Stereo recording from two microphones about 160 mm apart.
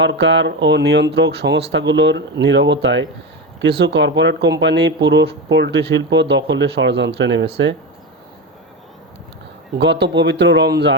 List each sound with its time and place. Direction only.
0.0 s speech: 90° right
9.7 s speech: 90° right